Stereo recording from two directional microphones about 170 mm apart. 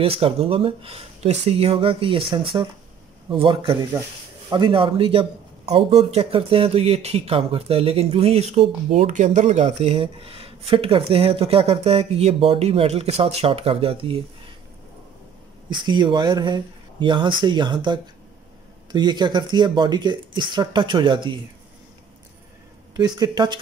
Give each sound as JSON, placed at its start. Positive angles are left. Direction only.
{"t": 0.0, "sound": "speech", "side_deg": -35}
{"t": 15.7, "sound": "speech", "side_deg": -25}
{"t": 22.9, "sound": "speech", "side_deg": -25}